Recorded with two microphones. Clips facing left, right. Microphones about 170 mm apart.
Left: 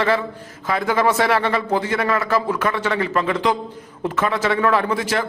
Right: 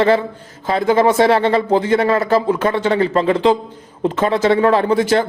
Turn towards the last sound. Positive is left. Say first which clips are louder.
# right 6 dB
turn(degrees=-30)  # may be behind; listen again after turning